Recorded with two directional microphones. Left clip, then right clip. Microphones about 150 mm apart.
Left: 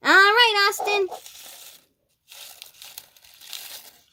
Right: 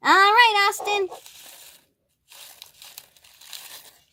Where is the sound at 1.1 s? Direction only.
20° left (ahead or behind).